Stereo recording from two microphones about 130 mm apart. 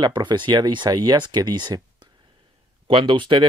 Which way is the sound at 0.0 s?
35° right (ahead or behind).